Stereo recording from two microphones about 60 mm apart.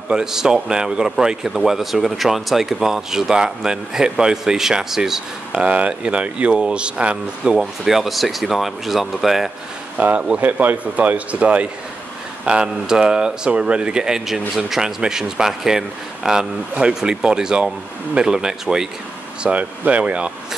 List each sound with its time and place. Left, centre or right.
0.1 s speech: centre
5.6 s speech: right
7.5 s speech: centre
9.9 s speech: right